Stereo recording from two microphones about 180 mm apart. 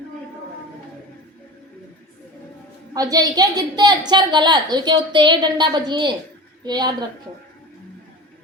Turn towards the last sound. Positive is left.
turn(degrees=-25)  # may be behind; listen again after turning